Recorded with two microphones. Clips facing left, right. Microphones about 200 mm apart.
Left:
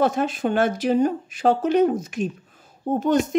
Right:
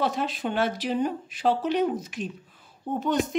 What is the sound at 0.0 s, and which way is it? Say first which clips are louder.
Speech: left 6 dB; 45° left (ahead or behind).